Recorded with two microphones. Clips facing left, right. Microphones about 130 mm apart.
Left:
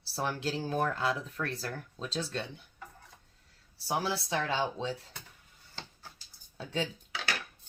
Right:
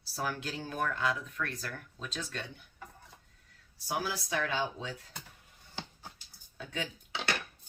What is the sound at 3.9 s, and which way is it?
Speech, 30° left (ahead or behind).